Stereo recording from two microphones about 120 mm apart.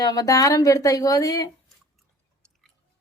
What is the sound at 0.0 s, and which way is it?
A woman's voice, 30° left (ahead or behind).